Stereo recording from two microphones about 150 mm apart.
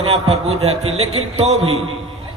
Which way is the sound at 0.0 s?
40° right (ahead or behind).